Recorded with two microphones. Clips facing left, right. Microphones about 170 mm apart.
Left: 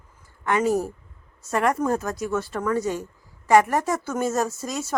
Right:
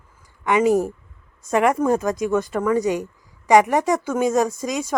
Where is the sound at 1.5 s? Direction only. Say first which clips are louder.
Right 4 dB; 5° right (ahead or behind).